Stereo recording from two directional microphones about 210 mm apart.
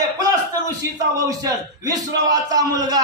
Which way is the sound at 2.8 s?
20° right (ahead or behind).